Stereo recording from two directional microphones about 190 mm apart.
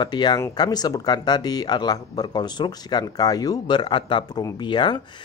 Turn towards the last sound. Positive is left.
turn(degrees=25)  # may be behind; listen again after turning